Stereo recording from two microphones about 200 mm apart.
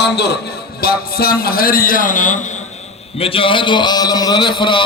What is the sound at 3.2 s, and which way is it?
A man's voice, 25° left (ahead or behind).